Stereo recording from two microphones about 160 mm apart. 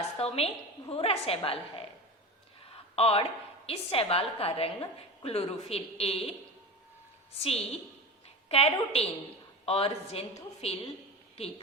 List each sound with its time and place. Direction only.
0.2 s a woman's voice: 40° left (ahead or behind)
2.9 s a woman's voice: 40° left (ahead or behind)
7.3 s a woman's voice: 40° left (ahead or behind)